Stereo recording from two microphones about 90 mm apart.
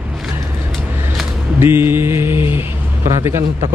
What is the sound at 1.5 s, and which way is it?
Mantra, 25° right (ahead or behind).